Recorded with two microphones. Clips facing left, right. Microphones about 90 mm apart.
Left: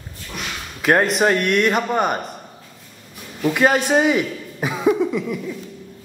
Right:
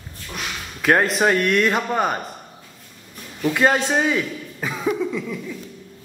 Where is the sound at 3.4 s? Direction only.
5° left (ahead or behind).